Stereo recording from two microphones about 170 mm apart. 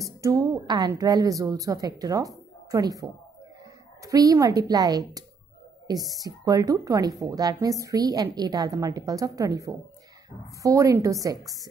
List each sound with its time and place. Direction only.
0.0 s speech: 20° right (ahead or behind)